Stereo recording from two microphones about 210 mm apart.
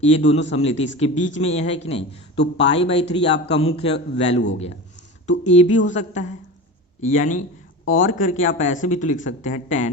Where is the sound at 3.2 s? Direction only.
55° left (ahead or behind).